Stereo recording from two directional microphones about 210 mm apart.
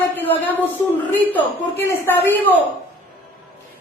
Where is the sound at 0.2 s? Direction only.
10° left (ahead or behind).